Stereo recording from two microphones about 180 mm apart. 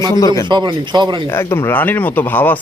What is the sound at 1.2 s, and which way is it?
Speech, 15° left (ahead or behind).